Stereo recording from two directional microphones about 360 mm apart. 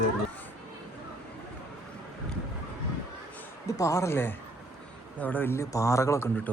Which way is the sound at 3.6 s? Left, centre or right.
Centre.